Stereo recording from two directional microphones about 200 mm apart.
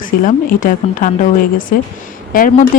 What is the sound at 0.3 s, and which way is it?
Speech, 40° left (ahead or behind).